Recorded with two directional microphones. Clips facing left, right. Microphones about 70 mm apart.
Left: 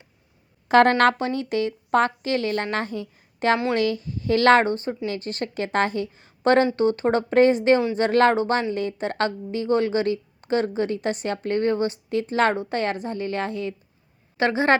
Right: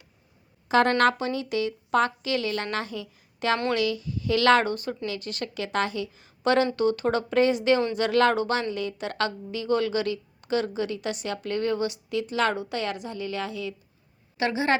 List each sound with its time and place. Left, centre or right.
0.7 s a woman's voice: left